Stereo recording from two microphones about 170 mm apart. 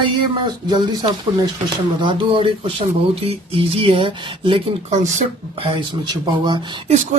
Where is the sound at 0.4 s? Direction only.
25° right (ahead or behind).